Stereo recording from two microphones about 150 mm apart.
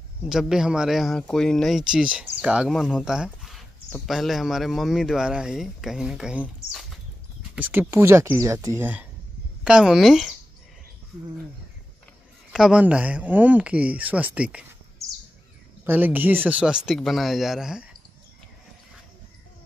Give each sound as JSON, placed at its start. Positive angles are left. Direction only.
{"t": 0.3, "sound": "a man's voice", "side_deg": -5}
{"t": 9.7, "sound": "a man's voice", "side_deg": -5}
{"t": 12.5, "sound": "speech", "side_deg": -5}
{"t": 15.8, "sound": "a man's voice", "side_deg": -10}